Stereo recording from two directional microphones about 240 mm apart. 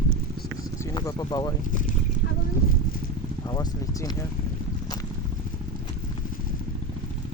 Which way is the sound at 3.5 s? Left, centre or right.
Centre.